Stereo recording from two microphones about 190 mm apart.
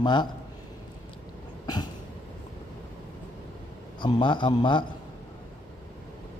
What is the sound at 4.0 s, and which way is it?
Speech, 25° left (ahead or behind).